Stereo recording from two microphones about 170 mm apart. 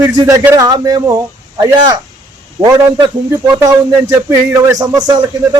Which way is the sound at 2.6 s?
20° right (ahead or behind).